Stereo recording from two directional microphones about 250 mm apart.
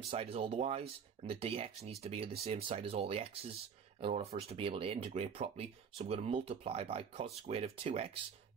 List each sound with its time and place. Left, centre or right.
0.1 s speech: right